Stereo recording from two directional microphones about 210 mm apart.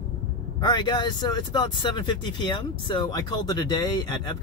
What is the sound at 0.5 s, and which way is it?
Speech, 20° left (ahead or behind).